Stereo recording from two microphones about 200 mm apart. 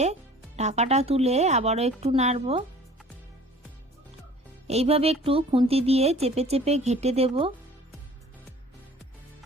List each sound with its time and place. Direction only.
0.0 s speech: 35° right (ahead or behind)
4.7 s speech: 30° right (ahead or behind)